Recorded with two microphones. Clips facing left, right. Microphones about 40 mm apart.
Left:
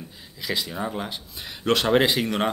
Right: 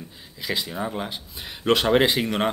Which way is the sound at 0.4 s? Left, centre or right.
Centre.